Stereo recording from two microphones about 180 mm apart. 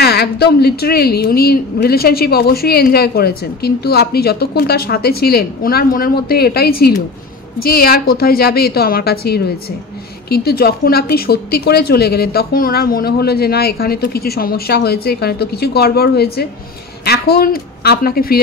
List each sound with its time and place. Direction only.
0.0 s a woman's voice: 65° left (ahead or behind)